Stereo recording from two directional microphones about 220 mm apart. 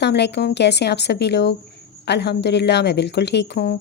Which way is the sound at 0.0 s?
50° left (ahead or behind).